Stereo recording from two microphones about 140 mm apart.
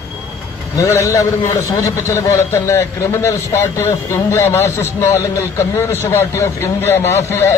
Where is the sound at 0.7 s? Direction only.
20° left (ahead or behind).